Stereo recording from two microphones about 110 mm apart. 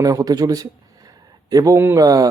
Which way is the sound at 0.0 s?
35° right (ahead or behind).